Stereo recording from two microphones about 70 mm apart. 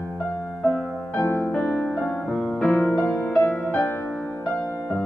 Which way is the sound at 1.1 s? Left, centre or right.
Left.